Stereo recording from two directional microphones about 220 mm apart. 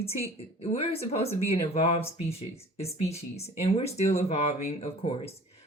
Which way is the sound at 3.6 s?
30° left (ahead or behind).